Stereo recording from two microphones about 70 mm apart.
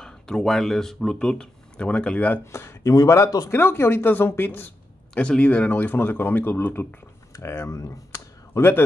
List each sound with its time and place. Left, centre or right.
0.0 s speech: centre; by 2.4 s left
2.4 s speech: left
2.9 s speech: left
3.4 s speech: left
5.1 s speech: centre; by 6.9 s left
7.4 s speech: left
8.5 s speech: left